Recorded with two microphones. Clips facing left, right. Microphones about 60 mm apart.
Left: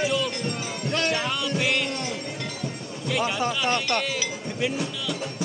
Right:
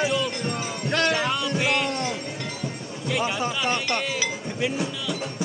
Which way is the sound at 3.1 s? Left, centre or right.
Centre.